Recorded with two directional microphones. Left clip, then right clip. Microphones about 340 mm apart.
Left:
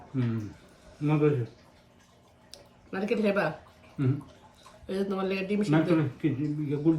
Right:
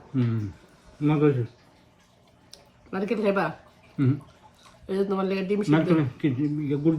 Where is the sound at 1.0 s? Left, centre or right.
Right.